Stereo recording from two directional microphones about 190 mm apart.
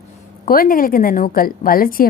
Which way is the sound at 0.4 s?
50° left (ahead or behind).